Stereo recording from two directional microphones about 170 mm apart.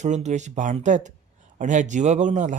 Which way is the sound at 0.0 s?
45° right (ahead or behind).